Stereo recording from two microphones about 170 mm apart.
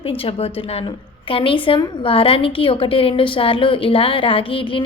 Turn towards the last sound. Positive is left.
turn(degrees=30)  # may be behind; listen again after turning